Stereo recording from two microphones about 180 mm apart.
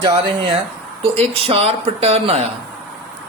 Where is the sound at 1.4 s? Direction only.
35° right (ahead or behind).